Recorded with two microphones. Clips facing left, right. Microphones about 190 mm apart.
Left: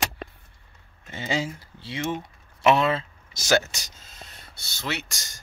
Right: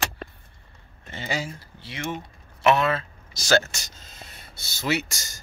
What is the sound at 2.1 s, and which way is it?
Typing, 15° left (ahead or behind).